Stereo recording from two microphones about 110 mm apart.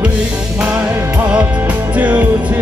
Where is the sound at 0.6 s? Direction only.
15° right (ahead or behind).